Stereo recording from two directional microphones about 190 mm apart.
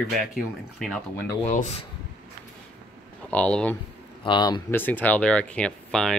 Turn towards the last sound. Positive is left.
turn(degrees=0)  # may be behind; listen again after turning